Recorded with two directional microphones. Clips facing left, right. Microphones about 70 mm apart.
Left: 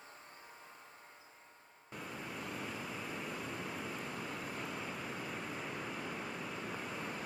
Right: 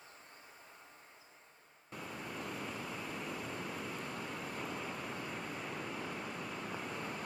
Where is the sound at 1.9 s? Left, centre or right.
Centre.